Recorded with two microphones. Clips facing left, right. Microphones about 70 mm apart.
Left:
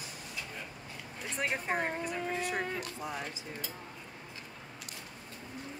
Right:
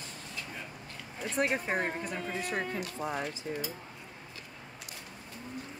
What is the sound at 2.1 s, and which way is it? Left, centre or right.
Music, centre.